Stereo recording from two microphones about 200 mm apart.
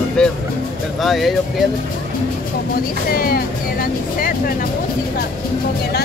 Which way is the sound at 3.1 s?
45° left (ahead or behind).